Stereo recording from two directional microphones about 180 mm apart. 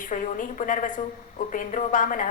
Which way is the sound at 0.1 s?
45° left (ahead or behind).